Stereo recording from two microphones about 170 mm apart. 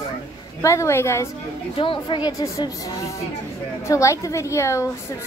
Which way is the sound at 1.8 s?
30° left (ahead or behind).